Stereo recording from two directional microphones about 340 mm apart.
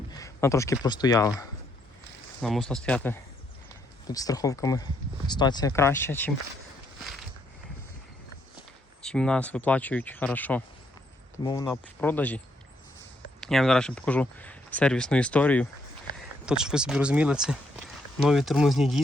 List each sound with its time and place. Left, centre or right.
0.1 s speech: centre
2.4 s speech: centre
9.0 s speech: centre
13.4 s speech: centre